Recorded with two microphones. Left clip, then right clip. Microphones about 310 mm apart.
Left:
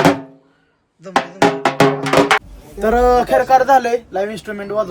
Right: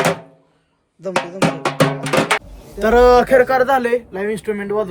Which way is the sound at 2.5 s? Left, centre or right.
Centre.